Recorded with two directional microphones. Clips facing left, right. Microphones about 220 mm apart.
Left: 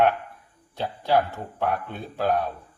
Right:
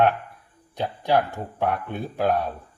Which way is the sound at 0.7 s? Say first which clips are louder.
Right 1 dB; 15° right (ahead or behind).